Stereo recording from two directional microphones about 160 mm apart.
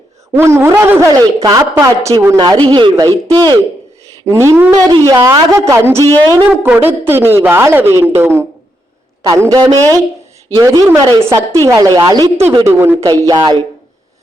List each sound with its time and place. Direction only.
0.3 s a woman's voice: 15° right (ahead or behind)